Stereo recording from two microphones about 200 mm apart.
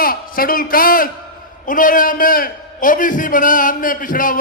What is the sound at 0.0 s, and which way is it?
A man's voice, 45° left (ahead or behind).